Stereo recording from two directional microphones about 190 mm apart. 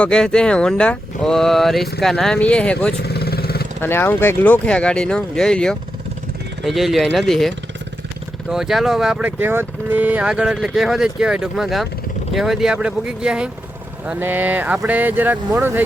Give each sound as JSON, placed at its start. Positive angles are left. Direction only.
{"t": 0.0, "sound": "speech", "side_deg": 5}
{"t": 2.9, "sound": "vehicle", "side_deg": 55}
{"t": 3.8, "sound": "speech", "side_deg": 10}